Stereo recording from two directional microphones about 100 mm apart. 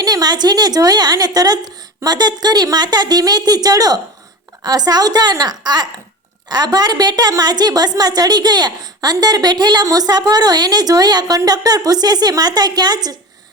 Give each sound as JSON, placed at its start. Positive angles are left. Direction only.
{"t": 0.0, "sound": "a woman's voice", "side_deg": -40}